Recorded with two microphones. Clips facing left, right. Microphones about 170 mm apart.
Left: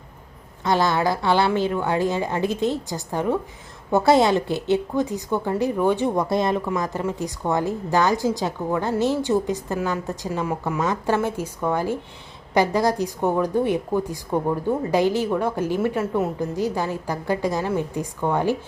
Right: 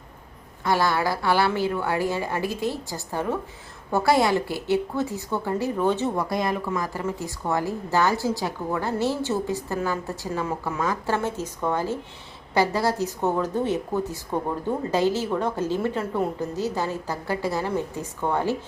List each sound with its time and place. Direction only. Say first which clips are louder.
0.6 s a woman's voice: left 2 dB; 20° left (ahead or behind)
6.2 s a woman's voice: left 4 dB; 25° left (ahead or behind)